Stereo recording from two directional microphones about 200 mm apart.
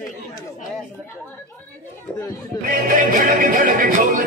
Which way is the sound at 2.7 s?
45° right (ahead or behind).